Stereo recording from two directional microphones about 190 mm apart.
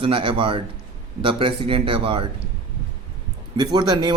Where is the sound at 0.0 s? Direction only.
25° right (ahead or behind).